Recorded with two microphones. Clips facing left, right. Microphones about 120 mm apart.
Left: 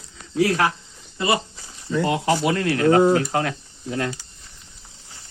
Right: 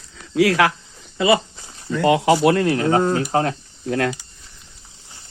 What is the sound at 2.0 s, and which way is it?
Speech, 90° right.